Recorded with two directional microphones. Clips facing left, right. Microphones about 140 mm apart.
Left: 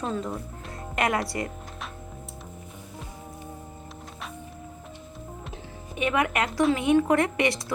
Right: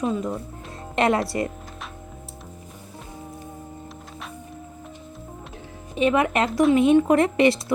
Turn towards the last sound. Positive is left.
turn(degrees=-25)  # may be behind; listen again after turning